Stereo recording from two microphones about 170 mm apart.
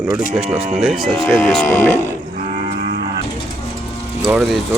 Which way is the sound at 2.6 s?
60° right (ahead or behind).